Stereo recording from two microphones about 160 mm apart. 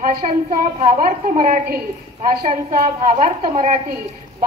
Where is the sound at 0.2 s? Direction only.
50° right (ahead or behind).